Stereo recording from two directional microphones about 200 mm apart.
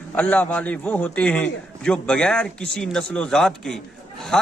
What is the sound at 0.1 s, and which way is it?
A man's voice, 5° left (ahead or behind).